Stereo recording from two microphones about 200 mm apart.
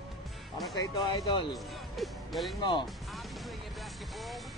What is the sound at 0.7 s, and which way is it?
Speech, 20° left (ahead or behind).